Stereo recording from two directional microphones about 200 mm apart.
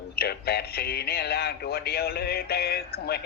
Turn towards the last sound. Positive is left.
turn(degrees=50)  # may be behind; listen again after turning